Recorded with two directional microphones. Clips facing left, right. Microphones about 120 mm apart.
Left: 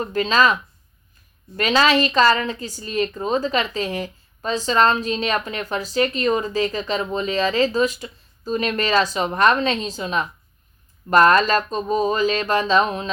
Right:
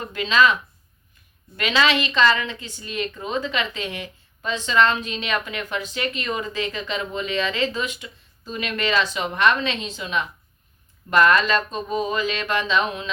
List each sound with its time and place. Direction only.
0.0 s speech: 40° left (ahead or behind)
1.5 s speech: 40° left (ahead or behind)